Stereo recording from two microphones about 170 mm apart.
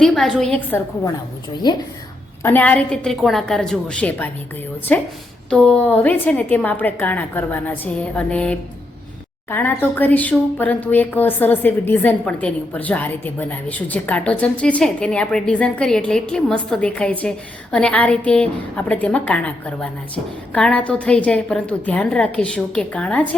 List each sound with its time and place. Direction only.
0.0 s a woman's voice: centre (ahead or behind)
1.6 s a woman's voice: 25° left (ahead or behind)
2.4 s a woman's voice: 10° left (ahead or behind)
5.5 s speech: 5° left (ahead or behind)